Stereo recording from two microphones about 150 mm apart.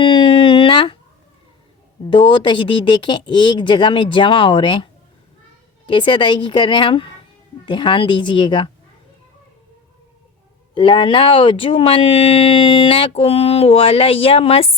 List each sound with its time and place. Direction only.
0.0 s a sound: 35° left (ahead or behind)
2.0 s speech: 35° left (ahead or behind)
10.8 s speech: 35° left (ahead or behind)